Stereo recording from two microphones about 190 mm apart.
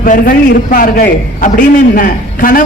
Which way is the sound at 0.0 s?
50° left (ahead or behind).